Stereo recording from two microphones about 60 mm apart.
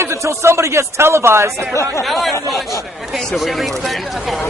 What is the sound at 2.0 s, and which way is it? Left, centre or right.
Speech, centre.